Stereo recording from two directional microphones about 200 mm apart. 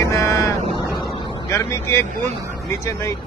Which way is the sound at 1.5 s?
10° left (ahead or behind).